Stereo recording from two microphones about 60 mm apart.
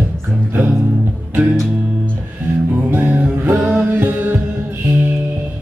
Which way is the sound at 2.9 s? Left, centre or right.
Right.